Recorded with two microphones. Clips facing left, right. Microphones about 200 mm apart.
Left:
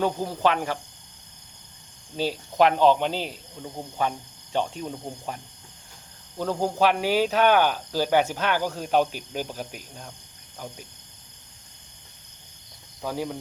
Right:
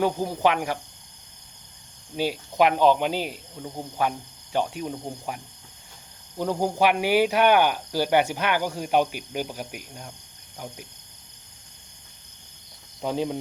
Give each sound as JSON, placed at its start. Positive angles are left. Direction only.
{"t": 0.0, "sound": "speech", "side_deg": -15}
{"t": 2.1, "sound": "speech", "side_deg": -10}
{"t": 13.0, "sound": "speech", "side_deg": -20}